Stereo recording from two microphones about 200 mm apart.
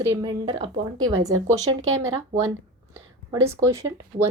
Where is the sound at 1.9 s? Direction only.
90° right.